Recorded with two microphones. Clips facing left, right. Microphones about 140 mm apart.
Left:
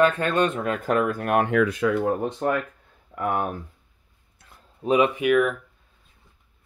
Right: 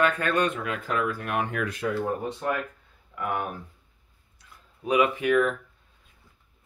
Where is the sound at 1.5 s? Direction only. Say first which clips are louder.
Left 8 dB; 90° left.